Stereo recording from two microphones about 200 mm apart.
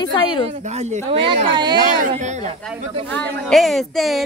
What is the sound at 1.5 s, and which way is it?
Speech, 20° right (ahead or behind).